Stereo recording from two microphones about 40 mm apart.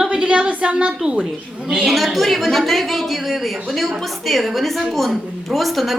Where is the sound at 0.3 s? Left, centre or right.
Right.